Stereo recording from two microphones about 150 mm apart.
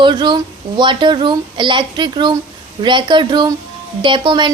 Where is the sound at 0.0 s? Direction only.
30° right (ahead or behind).